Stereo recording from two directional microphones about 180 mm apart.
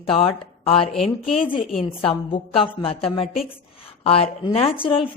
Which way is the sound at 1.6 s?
Centre (ahead or behind).